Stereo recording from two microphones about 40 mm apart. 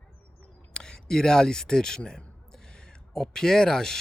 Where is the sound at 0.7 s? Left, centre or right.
Centre.